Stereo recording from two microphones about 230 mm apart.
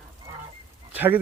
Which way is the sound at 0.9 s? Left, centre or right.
Centre.